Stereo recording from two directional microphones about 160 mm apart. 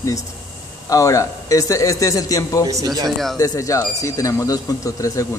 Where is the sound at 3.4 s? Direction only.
20° left (ahead or behind).